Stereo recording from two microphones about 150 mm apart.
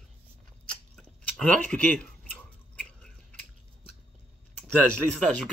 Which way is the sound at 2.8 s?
5° left (ahead or behind).